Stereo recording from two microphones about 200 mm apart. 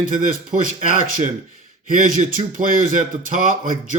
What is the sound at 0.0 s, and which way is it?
A man's voice, 45° right (ahead or behind).